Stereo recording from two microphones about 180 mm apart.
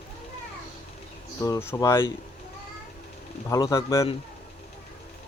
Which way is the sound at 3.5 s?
20° left (ahead or behind).